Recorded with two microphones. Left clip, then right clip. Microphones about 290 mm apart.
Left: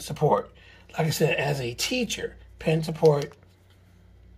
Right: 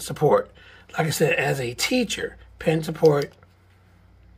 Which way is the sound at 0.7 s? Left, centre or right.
Centre.